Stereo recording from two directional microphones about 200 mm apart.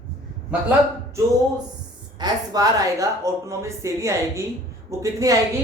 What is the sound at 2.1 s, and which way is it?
A woman's voice, 20° right (ahead or behind).